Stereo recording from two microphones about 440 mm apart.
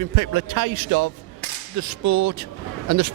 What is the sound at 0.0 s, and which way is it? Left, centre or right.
A man's voice, right.